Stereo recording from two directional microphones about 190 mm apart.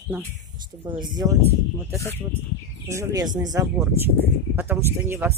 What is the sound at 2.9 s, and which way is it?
Speech, 15° right (ahead or behind).